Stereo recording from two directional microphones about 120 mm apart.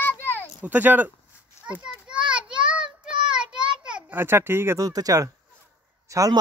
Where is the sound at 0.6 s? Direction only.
15° right (ahead or behind).